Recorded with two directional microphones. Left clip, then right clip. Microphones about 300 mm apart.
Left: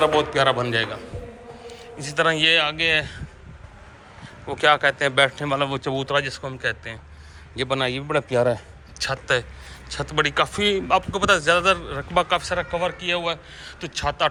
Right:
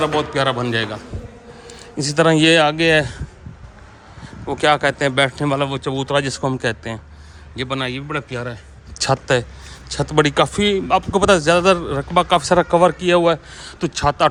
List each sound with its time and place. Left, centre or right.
0.0 s a man's voice: centre
4.4 s a man's voice: centre
7.5 s a man's voice: centre
9.0 s a man's voice: right